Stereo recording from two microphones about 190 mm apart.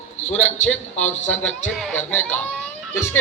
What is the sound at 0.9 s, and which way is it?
Speech, 35° left (ahead or behind).